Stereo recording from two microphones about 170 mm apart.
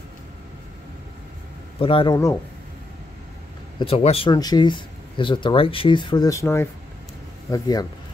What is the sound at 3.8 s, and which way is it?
Speech, 35° left (ahead or behind).